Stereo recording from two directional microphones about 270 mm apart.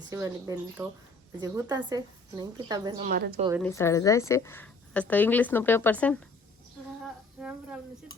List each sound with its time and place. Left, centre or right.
0.1 s a woman's voice: centre
3.0 s a woman's voice: right
3.6 s a woman's voice: centre
7.3 s a woman's voice: centre